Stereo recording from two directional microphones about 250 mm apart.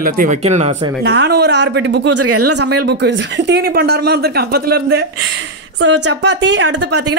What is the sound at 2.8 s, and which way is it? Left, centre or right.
Speech, right.